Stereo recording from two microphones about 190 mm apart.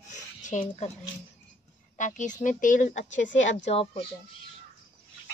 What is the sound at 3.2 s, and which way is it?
Speech, 75° left (ahead or behind).